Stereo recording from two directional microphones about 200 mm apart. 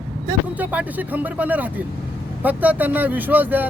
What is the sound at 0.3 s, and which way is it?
Speech, 10° right (ahead or behind).